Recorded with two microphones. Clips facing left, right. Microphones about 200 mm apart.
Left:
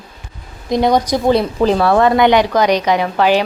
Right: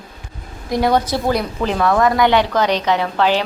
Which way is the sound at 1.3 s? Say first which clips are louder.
Left 6 dB; 35° left (ahead or behind).